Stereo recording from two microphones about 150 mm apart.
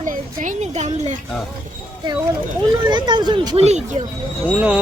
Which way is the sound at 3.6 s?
45° right (ahead or behind).